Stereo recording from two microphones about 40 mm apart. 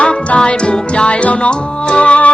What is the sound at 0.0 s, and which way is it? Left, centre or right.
Music, left.